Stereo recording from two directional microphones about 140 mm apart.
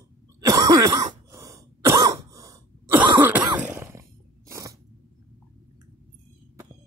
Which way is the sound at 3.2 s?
10° right (ahead or behind).